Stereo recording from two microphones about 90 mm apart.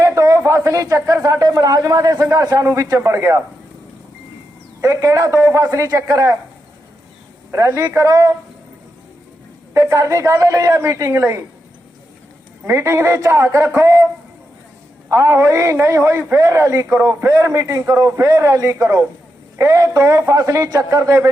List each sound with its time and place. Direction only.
0.0 s speech: 35° right (ahead or behind)
2.1 s a man's voice: 30° right (ahead or behind)
2.4 s a man's voice: 40° right (ahead or behind)
4.8 s a man's voice: 35° right (ahead or behind)
7.5 s a man's voice: 35° right (ahead or behind)
9.7 s a man's voice: 35° right (ahead or behind)
12.7 s a man's voice: 35° right (ahead or behind)
15.1 s a man's voice: 35° right (ahead or behind)